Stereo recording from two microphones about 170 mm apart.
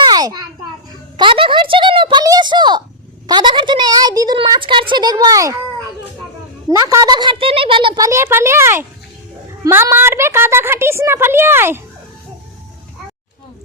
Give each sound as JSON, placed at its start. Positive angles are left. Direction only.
{"t": 0.0, "sound": "a sound", "side_deg": -25}
{"t": 1.1, "sound": "a woman's voice", "side_deg": -30}
{"t": 6.7, "sound": "a woman's voice", "side_deg": -20}
{"t": 8.0, "sound": "a woman's voice", "side_deg": -15}